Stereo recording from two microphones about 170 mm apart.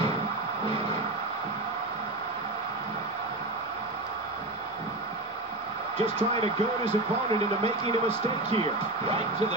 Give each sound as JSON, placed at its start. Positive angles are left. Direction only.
{"t": 5.9, "sound": "speech", "side_deg": -35}